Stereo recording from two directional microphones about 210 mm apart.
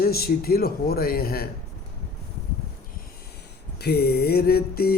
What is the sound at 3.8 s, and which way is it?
A man's voice, 50° left (ahead or behind).